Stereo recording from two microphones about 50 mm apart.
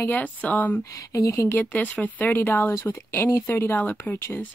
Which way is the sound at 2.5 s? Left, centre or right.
Left.